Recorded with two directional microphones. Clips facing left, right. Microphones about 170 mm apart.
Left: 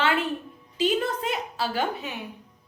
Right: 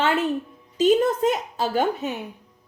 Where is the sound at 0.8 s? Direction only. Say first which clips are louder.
Right 7 dB; 45° right (ahead or behind).